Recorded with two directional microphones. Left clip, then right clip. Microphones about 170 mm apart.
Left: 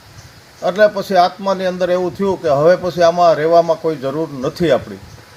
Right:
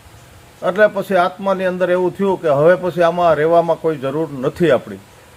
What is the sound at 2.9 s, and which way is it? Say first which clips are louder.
Speech: left 2 dB; 40° right (ahead or behind).